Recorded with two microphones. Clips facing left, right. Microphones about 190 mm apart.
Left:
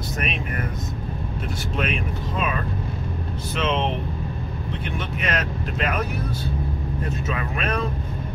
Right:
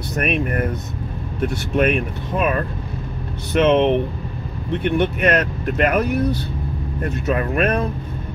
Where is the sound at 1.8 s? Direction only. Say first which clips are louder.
Right 9 dB; 55° right (ahead or behind).